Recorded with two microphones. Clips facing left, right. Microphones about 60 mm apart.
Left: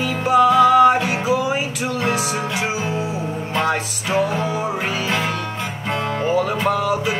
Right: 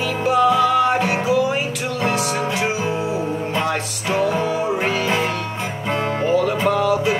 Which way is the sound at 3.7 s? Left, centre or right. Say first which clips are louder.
Left 2 dB; centre.